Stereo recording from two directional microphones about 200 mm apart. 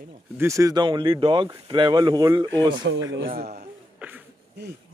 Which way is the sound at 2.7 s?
70° right (ahead or behind).